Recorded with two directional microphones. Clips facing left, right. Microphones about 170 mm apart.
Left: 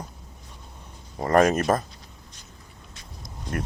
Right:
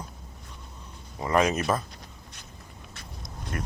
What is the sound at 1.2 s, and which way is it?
Speech, 45° left (ahead or behind).